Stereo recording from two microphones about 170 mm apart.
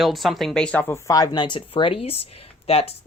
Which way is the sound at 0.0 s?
Centre (ahead or behind).